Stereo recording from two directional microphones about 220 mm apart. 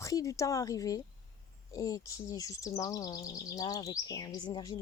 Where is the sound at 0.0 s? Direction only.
15° left (ahead or behind).